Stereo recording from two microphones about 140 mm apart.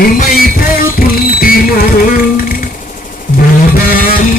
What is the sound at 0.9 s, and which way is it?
Music, 90° left.